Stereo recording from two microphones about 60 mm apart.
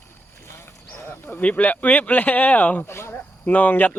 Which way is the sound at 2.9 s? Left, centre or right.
Left.